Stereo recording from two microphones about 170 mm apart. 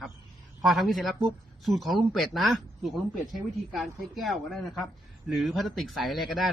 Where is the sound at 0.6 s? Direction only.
Centre (ahead or behind).